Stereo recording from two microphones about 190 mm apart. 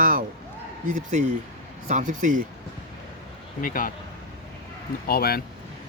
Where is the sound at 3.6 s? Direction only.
45° left (ahead or behind).